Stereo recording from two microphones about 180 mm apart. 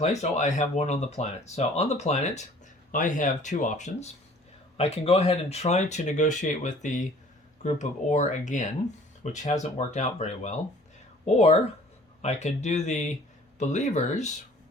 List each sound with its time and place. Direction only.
0.0 s speech: 40° left (ahead or behind)